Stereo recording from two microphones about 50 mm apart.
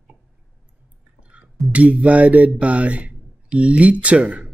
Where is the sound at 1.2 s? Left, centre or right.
Right.